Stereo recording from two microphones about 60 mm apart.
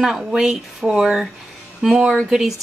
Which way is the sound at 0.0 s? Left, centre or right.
Centre.